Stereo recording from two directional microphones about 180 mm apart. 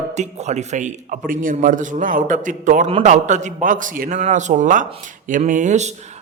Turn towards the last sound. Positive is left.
turn(degrees=-40)  # may be behind; listen again after turning